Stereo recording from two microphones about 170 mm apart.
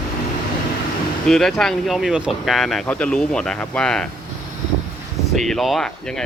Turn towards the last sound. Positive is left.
turn(degrees=0)  # may be behind; listen again after turning